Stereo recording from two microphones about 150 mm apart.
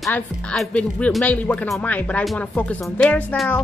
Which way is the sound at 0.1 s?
5° left (ahead or behind).